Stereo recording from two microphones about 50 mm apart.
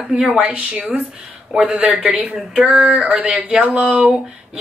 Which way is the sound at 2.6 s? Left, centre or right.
Right.